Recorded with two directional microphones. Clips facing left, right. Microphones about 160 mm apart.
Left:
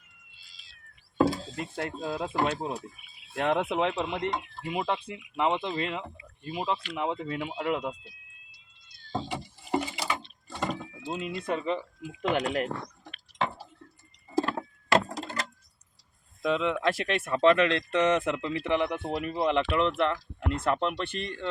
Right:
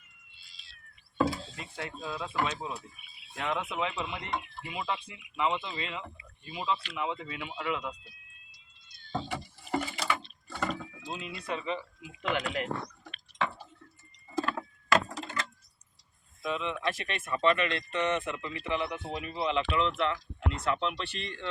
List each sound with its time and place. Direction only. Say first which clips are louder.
1.2 s a sound: left 4 dB; 40° left (ahead or behind)
2.0 s speech: left 4 dB; 50° left (ahead or behind)
3.3 s speech: left 7 dB; 55° left (ahead or behind)
9.1 s a sound: left 2 dB; 15° left (ahead or behind)
11.2 s speech: left 6 dB; 50° left (ahead or behind)
13.4 s squish: left 2 dB; 30° left (ahead or behind)
14.3 s a sound: left 4 dB; 30° left (ahead or behind)
15.1 s door: left 2 dB; 35° left (ahead or behind)
16.4 s speech: left 6 dB; 85° left; by 21.5 s 45° left (ahead or behind)